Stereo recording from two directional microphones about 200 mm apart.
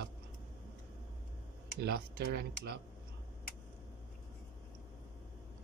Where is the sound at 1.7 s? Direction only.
55° right (ahead or behind).